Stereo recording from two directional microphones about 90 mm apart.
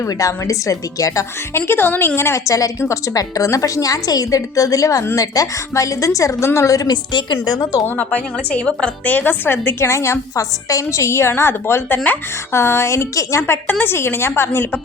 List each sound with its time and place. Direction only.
0.0 s a woman's voice: 40° left (ahead or behind)
7.9 s a woman's voice: 15° left (ahead or behind)